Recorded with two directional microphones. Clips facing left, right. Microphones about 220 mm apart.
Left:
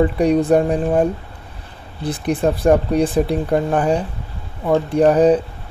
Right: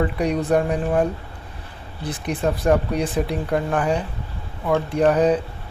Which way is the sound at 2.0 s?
30° left (ahead or behind).